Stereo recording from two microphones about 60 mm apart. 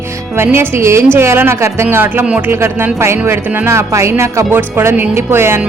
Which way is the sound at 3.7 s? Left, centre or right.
Right.